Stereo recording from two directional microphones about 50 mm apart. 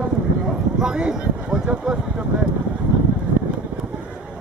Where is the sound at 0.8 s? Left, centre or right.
Centre.